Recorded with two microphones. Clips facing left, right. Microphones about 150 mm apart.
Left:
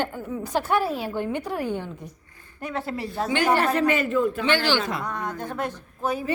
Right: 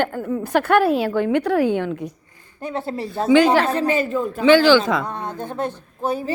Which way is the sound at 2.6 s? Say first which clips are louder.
Right 4 dB; 25° right (ahead or behind).